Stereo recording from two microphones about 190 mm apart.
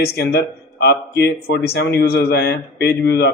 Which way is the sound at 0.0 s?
55° left (ahead or behind).